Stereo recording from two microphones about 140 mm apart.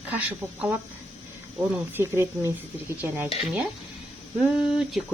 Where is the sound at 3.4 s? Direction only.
5° right (ahead or behind).